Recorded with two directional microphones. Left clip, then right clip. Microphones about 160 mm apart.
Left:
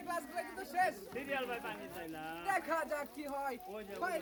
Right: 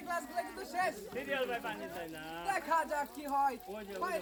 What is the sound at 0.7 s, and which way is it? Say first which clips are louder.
Speech: left 1 dB; 25° left (ahead or behind).